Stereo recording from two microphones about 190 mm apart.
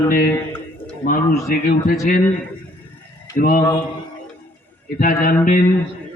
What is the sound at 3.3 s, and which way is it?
Speech, 50° left (ahead or behind).